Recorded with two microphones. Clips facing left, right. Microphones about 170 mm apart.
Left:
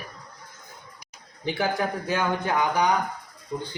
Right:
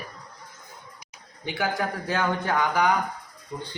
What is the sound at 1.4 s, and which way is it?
Speech, 30° left (ahead or behind).